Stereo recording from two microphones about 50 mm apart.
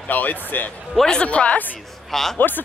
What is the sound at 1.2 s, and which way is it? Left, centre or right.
Speech, left.